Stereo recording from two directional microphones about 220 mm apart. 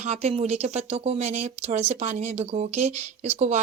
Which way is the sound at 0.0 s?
30° right (ahead or behind).